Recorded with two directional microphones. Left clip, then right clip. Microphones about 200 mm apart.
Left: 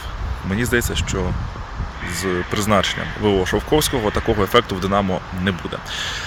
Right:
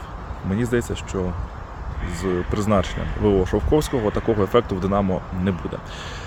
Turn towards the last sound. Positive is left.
turn(degrees=-5)  # may be behind; listen again after turning